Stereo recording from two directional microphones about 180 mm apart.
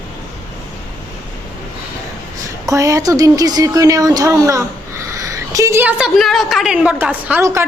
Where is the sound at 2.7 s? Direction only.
15° right (ahead or behind).